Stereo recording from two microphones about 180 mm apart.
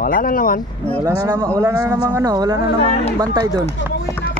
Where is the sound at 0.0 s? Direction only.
50° left (ahead or behind).